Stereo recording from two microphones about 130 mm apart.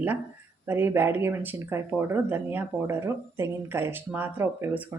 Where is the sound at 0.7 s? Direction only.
15° right (ahead or behind).